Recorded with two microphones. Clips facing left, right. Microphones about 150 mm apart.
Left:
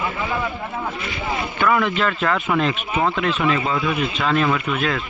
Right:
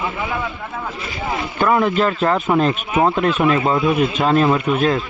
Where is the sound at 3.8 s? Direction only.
25° right (ahead or behind).